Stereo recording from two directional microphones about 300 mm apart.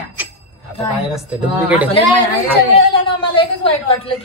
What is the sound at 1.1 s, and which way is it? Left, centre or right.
Speech, centre.